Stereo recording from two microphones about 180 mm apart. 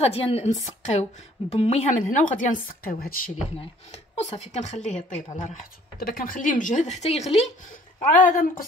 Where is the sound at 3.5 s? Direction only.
35° left (ahead or behind).